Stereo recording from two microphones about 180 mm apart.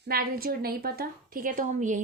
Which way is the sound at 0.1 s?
55° right (ahead or behind).